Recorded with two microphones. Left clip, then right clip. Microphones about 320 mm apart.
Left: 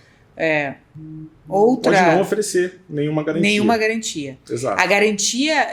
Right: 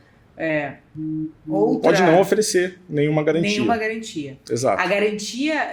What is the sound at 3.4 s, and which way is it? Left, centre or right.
Speech, left.